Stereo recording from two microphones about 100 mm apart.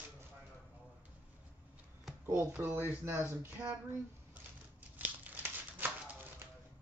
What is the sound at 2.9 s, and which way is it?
Speech, 25° right (ahead or behind).